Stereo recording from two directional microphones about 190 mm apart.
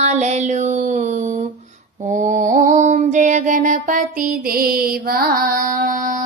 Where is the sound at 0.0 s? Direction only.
40° right (ahead or behind).